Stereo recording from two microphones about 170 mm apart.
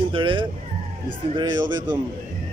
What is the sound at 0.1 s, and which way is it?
Vehicle, 30° right (ahead or behind).